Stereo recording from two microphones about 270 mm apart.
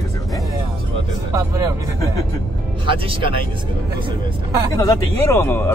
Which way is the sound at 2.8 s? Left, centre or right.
Centre.